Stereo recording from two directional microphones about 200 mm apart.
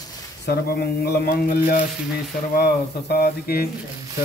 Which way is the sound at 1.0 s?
50° left (ahead or behind).